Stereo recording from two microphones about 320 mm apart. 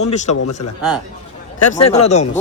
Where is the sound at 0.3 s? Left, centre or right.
Left.